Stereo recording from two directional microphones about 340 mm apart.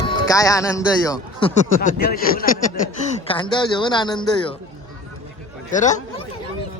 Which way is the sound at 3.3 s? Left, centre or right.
Centre.